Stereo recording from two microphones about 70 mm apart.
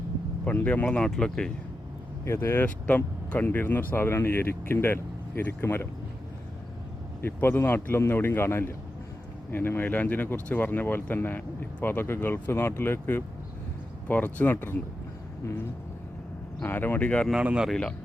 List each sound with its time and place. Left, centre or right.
0.6 s speech: centre
2.2 s speech: left
7.2 s speech: left
16.6 s speech: left
17.3 s speech: centre
17.7 s speech: centre